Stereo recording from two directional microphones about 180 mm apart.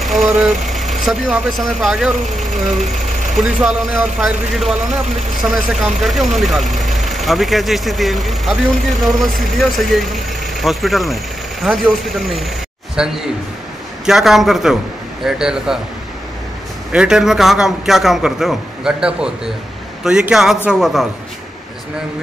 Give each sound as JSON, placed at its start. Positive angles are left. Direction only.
{"t": 0.0, "sound": "vehicle", "side_deg": 0}
{"t": 0.7, "sound": "speech", "side_deg": 0}
{"t": 3.1, "sound": "vehicle", "side_deg": -40}
{"t": 3.3, "sound": "speech", "side_deg": -5}
{"t": 16.9, "sound": "speech", "side_deg": -5}